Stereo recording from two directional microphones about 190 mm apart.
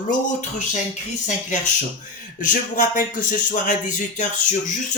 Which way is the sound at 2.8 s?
45° left (ahead or behind).